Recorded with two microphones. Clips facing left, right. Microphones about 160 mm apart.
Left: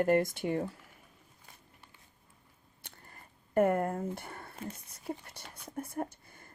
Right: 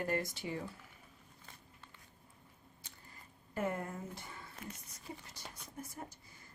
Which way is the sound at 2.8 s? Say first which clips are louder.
Left 6 dB; 60° left (ahead or behind).